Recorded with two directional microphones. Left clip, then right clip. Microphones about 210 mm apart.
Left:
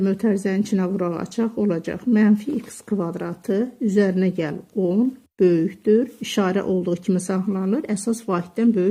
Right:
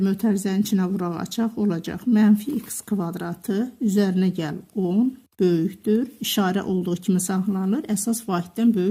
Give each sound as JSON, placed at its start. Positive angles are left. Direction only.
{"t": 0.0, "sound": "speech", "side_deg": -35}